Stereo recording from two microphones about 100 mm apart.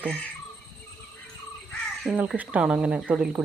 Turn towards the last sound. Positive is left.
turn(degrees=-10)  # may be behind; listen again after turning